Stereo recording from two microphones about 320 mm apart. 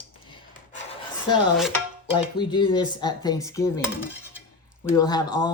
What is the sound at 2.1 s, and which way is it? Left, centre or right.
Speech, centre.